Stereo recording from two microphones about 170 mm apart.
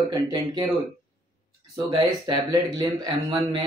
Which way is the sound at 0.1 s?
25° right (ahead or behind).